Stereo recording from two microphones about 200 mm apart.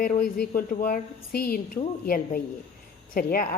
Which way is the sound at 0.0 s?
45° left (ahead or behind).